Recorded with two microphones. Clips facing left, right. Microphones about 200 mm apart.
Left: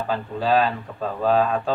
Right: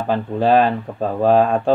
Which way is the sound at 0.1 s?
50° right (ahead or behind).